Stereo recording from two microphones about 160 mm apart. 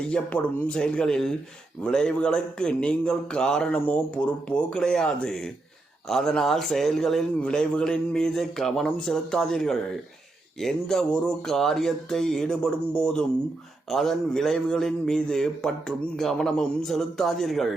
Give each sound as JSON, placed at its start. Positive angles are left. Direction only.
{"t": 0.1, "sound": "a man's voice", "side_deg": 5}